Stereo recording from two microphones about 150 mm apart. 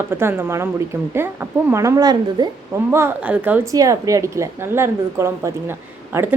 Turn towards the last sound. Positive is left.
turn(degrees=-15)  # may be behind; listen again after turning